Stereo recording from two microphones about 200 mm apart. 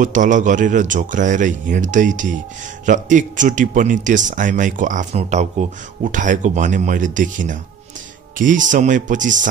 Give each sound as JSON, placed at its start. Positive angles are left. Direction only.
{"t": 0.0, "sound": "speech", "side_deg": -40}